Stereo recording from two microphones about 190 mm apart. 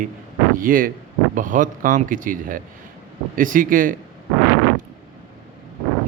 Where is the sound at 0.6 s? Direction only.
50° right (ahead or behind).